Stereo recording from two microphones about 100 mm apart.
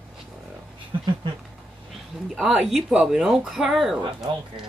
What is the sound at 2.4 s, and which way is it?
Speech, 10° right (ahead or behind).